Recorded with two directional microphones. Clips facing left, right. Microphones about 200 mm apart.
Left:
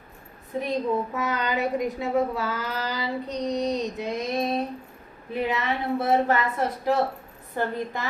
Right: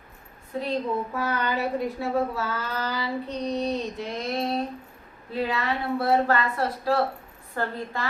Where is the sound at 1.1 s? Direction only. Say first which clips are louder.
Even; 20° left (ahead or behind).